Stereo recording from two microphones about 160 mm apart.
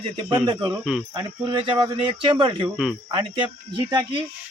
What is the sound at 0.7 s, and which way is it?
Speech, 5° right (ahead or behind).